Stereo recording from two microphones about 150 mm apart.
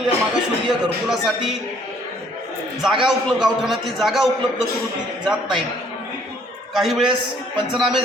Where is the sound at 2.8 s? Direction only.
5° right (ahead or behind).